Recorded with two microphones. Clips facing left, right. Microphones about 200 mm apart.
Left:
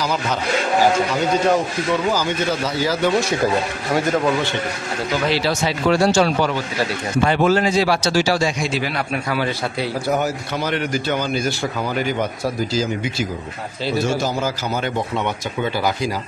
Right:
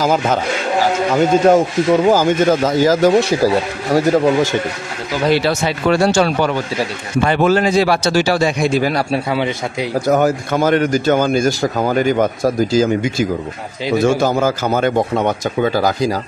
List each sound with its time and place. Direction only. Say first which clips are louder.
0.0 s speech: right 6 dB; 45° right (ahead or behind)
5.3 s speech: right 4 dB; 55° right (ahead or behind)
9.1 s a man's voice: right 4 dB; 25° right (ahead or behind)
10.0 s speech: right 9 dB; 50° right (ahead or behind)